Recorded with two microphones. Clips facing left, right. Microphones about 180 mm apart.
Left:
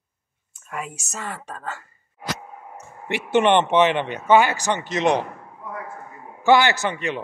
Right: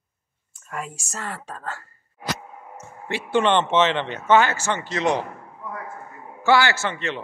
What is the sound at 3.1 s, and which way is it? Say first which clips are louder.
Speech: left 2 dB; 20° left (ahead or behind).